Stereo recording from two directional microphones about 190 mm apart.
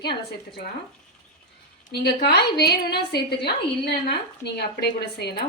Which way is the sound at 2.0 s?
60° left (ahead or behind).